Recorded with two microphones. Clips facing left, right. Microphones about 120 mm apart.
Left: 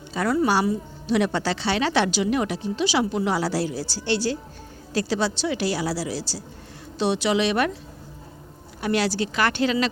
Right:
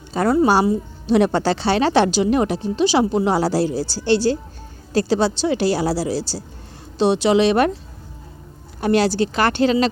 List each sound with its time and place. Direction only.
0.1 s speech: 35° right (ahead or behind)
8.8 s speech: 30° right (ahead or behind)